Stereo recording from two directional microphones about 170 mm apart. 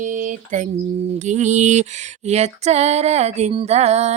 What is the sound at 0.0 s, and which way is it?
Mantra, 50° right (ahead or behind).